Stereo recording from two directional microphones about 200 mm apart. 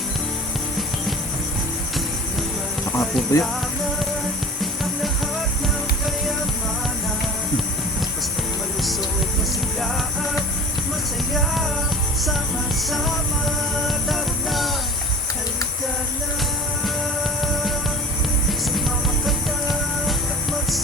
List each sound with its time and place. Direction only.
3.3 s music: 15° left (ahead or behind)
4.6 s music: centre (ahead or behind)
11.3 s music: centre (ahead or behind)
13.8 s music: centre (ahead or behind)
20.1 s music: centre (ahead or behind)